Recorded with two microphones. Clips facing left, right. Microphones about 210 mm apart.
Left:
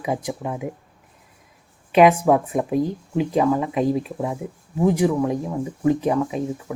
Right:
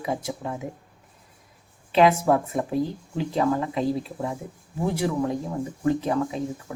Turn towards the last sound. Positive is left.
turn(degrees=15)  # may be behind; listen again after turning